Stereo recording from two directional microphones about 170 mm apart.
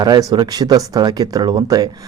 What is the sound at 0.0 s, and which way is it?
Speech, 20° right (ahead or behind).